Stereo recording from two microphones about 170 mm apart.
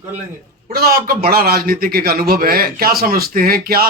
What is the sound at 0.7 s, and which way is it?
A man's voice, 60° right (ahead or behind).